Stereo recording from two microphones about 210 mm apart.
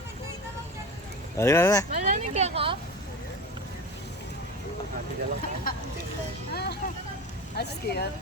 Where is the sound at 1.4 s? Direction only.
15° left (ahead or behind).